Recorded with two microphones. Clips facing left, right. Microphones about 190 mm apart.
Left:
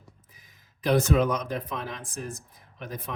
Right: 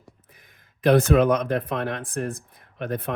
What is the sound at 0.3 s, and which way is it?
Speech, 60° right (ahead or behind).